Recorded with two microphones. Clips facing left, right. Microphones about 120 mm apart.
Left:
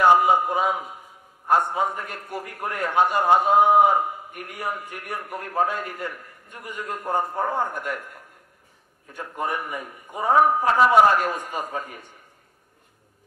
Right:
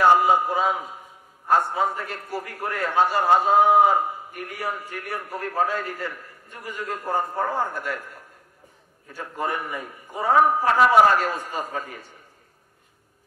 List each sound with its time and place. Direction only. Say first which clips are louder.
0.1 s a man's voice: even; 15° left (ahead or behind)
9.1 s a man's voice: even; 15° left (ahead or behind)